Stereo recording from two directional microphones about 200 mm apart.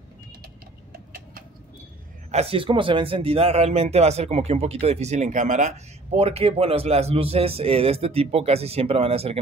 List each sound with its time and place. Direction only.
2.3 s speech: 30° right (ahead or behind)